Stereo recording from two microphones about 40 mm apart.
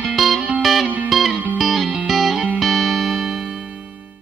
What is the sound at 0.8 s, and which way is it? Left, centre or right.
Music, right.